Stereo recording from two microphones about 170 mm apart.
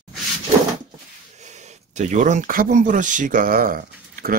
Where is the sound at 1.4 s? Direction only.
45° right (ahead or behind).